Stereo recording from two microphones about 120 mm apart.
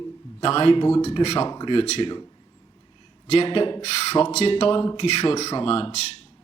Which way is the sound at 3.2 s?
50° left (ahead or behind).